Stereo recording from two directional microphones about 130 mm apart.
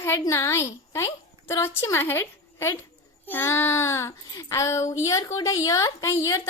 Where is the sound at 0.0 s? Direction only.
20° left (ahead or behind).